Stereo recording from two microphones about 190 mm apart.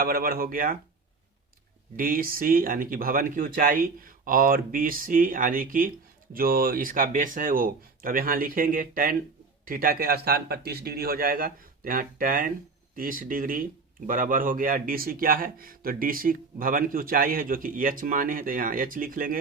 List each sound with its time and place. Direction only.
0.0 s a man's voice: 50° right (ahead or behind)
2.0 s a man's voice: 50° right (ahead or behind)